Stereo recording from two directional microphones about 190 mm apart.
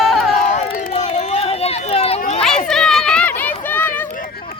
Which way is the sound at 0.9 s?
35° left (ahead or behind).